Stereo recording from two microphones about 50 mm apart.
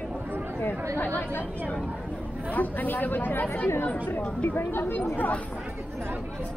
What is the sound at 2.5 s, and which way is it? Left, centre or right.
Speech, left.